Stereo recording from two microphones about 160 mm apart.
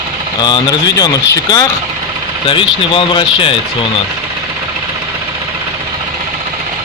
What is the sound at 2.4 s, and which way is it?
Speech, 30° left (ahead or behind).